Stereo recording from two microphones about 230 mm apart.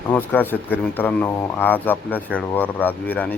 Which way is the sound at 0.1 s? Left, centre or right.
Centre.